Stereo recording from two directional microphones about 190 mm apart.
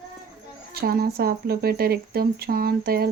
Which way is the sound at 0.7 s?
55° right (ahead or behind).